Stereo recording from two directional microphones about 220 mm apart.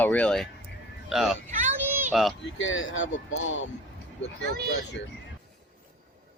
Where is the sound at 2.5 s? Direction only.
60° left (ahead or behind).